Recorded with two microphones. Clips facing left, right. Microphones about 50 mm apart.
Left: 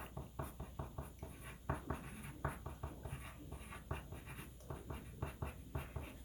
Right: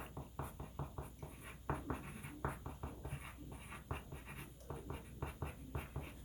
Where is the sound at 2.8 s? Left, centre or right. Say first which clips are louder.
Right 1 dB; centre.